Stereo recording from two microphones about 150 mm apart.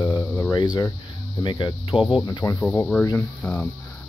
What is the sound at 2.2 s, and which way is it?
Speech, 25° left (ahead or behind).